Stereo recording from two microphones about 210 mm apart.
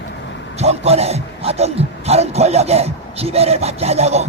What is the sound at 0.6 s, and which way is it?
A man's voice, 30° right (ahead or behind).